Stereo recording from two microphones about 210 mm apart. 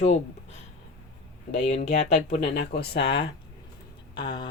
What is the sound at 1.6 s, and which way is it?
Speech, 30° left (ahead or behind).